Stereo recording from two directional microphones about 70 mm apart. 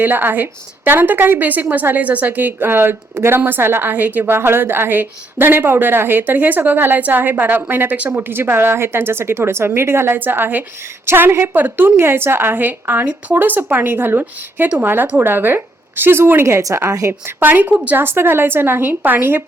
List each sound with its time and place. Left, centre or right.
0.0 s a woman's voice: right
17.1 s speech: right